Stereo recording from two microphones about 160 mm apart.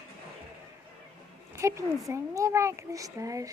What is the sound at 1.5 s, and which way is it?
A child's voice, 20° right (ahead or behind).